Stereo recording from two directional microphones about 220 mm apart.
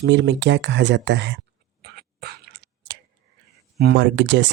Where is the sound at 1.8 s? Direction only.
45° right (ahead or behind).